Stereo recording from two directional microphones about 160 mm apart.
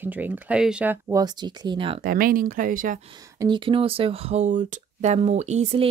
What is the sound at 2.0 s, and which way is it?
Speech, 60° right (ahead or behind).